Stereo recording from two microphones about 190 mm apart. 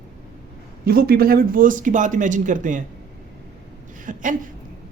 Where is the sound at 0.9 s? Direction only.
55° right (ahead or behind).